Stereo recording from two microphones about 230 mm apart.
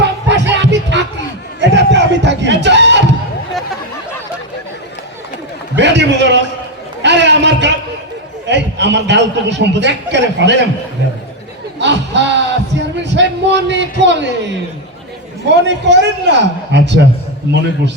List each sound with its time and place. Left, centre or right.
0.0 s music: right
1.7 s a sound: right
5.7 s a man's voice: right
7.0 s chatter: right
8.4 s a man's voice: right
11.8 s a sound: right
14.0 s a man's voice: right